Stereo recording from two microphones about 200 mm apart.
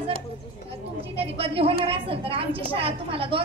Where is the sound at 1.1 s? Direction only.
30° right (ahead or behind).